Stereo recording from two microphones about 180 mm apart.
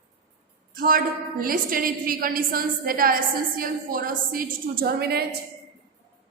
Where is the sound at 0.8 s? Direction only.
50° right (ahead or behind).